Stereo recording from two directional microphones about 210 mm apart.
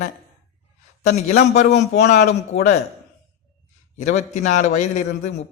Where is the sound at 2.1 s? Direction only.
35° left (ahead or behind).